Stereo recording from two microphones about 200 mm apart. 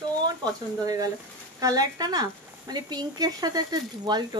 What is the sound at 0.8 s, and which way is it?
Speech, 15° right (ahead or behind).